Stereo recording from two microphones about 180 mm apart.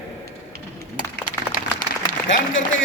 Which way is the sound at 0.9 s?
50° left (ahead or behind).